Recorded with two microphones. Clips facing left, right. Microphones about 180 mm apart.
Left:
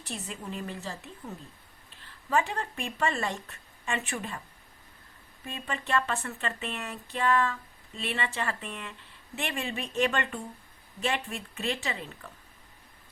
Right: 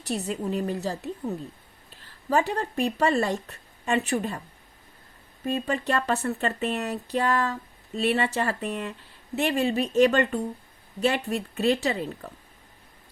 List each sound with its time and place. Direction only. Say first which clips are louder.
0.3 s speech: right 10 dB; 40° right (ahead or behind)
5.5 s speech: right 6 dB; 40° right (ahead or behind)